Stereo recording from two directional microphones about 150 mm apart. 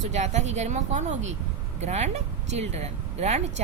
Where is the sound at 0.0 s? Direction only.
50° right (ahead or behind).